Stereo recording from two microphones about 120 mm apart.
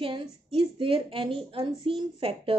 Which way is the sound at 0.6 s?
45° right (ahead or behind).